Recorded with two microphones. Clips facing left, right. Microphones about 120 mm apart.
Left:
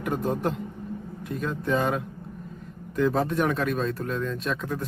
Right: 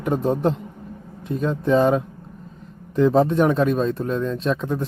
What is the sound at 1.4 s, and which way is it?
Speech, 30° right (ahead or behind).